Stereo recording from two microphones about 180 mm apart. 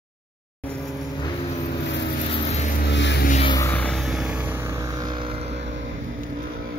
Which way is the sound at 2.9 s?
75° left (ahead or behind).